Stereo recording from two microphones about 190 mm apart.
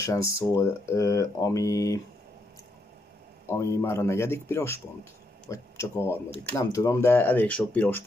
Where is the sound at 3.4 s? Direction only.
15° left (ahead or behind).